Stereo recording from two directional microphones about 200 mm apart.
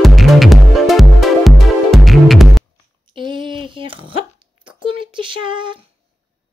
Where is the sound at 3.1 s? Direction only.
25° right (ahead or behind).